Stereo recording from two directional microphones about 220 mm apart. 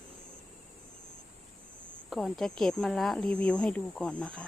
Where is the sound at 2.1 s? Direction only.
Centre (ahead or behind).